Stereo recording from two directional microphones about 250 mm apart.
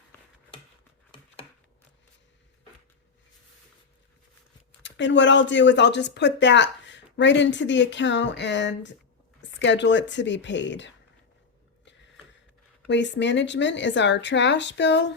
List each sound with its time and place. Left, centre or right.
4.8 s speech: left
12.9 s speech: left